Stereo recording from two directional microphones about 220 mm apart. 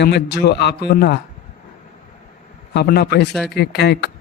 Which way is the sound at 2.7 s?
45° left (ahead or behind).